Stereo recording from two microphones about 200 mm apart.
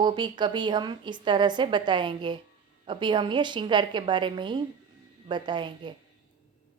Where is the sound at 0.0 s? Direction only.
20° right (ahead or behind).